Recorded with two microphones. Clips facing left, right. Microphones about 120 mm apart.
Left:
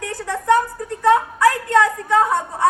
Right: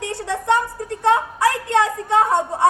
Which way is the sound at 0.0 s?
25° right (ahead or behind).